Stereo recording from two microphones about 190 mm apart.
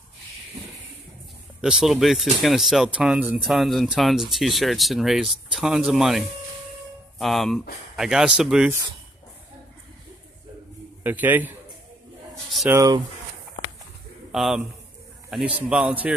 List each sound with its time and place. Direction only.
1.6 s speech: 5° right (ahead or behind)
11.1 s a man's voice: 10° right (ahead or behind)
12.7 s speech: 20° right (ahead or behind)
14.3 s a man's voice: centre (ahead or behind)